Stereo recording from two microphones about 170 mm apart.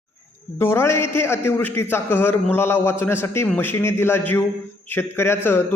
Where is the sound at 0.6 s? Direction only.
15° left (ahead or behind).